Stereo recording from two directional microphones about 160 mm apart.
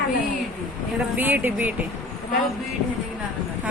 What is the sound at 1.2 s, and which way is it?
Speech, 10° right (ahead or behind).